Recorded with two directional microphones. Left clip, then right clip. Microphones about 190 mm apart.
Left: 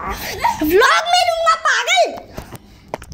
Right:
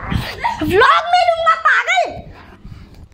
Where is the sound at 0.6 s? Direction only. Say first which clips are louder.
Right 2 dB; centre (ahead or behind).